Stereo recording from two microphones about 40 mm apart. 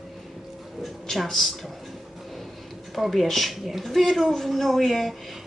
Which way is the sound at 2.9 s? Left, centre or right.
Centre.